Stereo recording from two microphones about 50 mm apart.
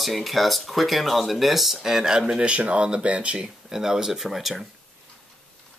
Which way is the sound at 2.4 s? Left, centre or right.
Right.